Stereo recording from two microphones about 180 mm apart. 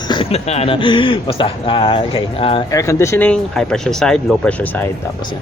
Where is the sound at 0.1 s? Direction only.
30° left (ahead or behind).